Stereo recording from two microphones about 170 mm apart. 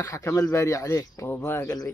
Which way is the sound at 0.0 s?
15° left (ahead or behind).